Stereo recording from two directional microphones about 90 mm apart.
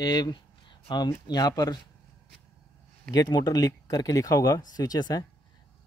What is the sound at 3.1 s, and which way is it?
Speech, 45° left (ahead or behind).